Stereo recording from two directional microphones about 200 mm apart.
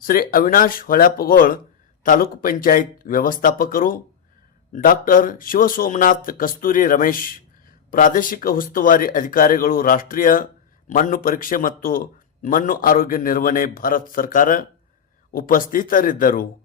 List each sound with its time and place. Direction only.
0.0 s speech: 45° left (ahead or behind)